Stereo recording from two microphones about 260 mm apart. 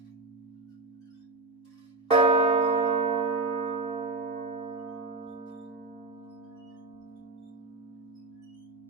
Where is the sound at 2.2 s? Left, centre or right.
Right.